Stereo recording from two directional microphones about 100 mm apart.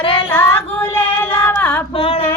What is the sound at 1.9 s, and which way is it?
Female singing, 65° left (ahead or behind).